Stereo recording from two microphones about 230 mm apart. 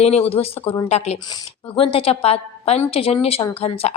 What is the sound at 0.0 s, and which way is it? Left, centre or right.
A woman's voice, left.